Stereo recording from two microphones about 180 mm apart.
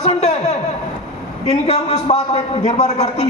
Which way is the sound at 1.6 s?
40° left (ahead or behind).